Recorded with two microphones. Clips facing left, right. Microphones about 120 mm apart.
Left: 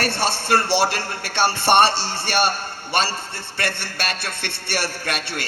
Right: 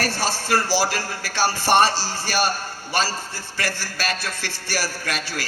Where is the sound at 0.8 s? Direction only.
65° left (ahead or behind).